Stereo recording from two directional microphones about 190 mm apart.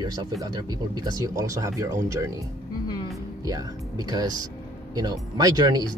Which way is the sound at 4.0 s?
20° right (ahead or behind).